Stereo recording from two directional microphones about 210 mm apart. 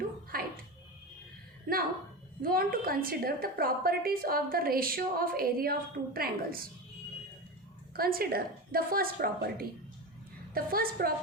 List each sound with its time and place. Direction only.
0.3 s music: 45° right (ahead or behind)
1.7 s a sound: 45° right (ahead or behind)
2.4 s a woman's voice: 45° right (ahead or behind)
7.9 s a woman's voice: 45° right (ahead or behind)